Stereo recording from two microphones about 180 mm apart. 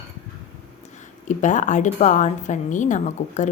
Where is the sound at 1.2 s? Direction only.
45° left (ahead or behind).